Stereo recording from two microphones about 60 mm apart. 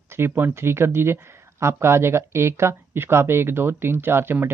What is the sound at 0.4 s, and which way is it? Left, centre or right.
Speech, right.